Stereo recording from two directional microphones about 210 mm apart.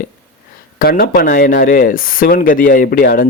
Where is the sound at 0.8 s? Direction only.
45° left (ahead or behind).